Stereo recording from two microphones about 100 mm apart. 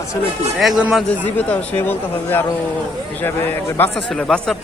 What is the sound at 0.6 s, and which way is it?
Speech, 5° right (ahead or behind).